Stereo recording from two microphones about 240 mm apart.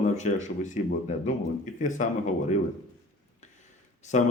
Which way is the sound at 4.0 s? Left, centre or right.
Left.